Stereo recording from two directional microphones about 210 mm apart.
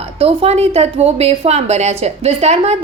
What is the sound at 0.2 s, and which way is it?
A woman's voice, 30° right (ahead or behind).